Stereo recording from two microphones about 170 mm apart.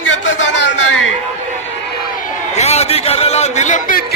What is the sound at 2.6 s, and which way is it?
A man's voice, 40° left (ahead or behind).